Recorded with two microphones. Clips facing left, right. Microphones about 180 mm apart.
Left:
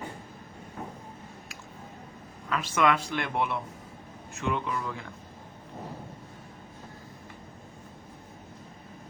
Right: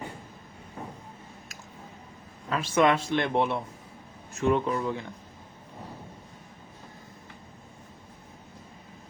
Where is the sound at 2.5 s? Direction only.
30° right (ahead or behind).